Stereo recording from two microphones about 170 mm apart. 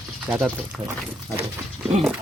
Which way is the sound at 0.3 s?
10° right (ahead or behind).